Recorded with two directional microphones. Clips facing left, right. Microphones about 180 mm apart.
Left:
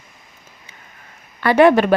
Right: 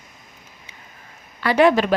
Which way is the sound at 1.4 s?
55° left (ahead or behind).